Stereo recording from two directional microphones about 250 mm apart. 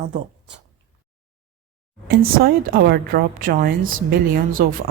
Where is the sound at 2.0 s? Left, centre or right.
Right.